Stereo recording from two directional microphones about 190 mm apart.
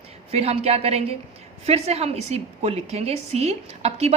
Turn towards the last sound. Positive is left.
turn(degrees=-35)  # may be behind; listen again after turning